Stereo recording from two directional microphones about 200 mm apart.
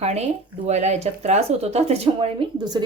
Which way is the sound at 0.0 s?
30° right (ahead or behind).